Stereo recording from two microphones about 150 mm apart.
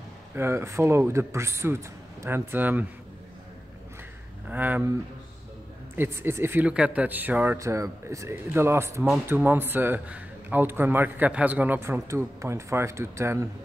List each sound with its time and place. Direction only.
0.4 s a man's voice: 15° right (ahead or behind)
4.5 s a man's voice: 10° right (ahead or behind)
5.9 s a man's voice: 15° right (ahead or behind)